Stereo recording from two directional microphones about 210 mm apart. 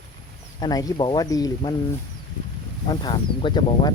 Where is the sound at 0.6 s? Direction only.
15° left (ahead or behind).